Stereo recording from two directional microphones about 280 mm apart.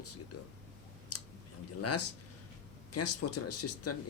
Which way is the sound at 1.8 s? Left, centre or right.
Left.